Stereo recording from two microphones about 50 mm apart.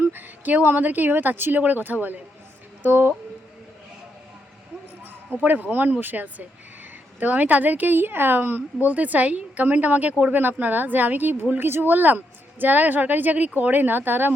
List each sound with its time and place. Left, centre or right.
0.0 s a sound: right
0.6 s a woman's voice: right
5.4 s a woman's voice: right
8.9 s a woman's voice: right
10.3 s a woman's voice: right